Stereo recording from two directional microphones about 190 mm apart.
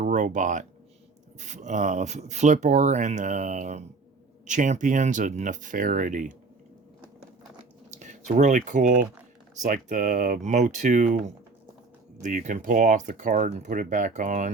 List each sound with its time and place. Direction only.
0.0 s speech: 40° right (ahead or behind)
7.9 s speech: 40° right (ahead or behind)
12.2 s speech: 40° right (ahead or behind)